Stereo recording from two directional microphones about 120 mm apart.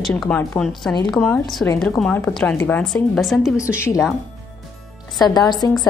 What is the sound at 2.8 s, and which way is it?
Speech, centre (ahead or behind).